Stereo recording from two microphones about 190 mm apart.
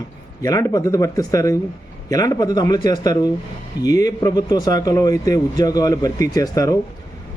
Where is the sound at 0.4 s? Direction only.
15° left (ahead or behind).